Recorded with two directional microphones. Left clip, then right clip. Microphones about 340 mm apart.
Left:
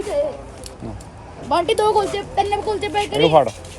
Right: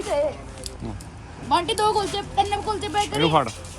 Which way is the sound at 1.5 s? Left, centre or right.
Left.